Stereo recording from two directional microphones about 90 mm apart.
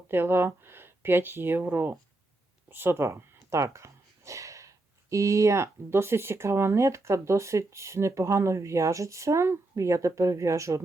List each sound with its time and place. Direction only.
0.1 s speech: 25° right (ahead or behind)